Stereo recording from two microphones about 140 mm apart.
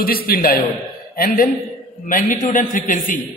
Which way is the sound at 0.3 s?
90° left.